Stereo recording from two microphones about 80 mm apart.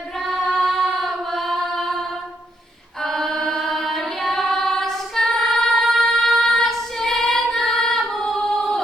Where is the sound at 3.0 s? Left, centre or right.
Centre.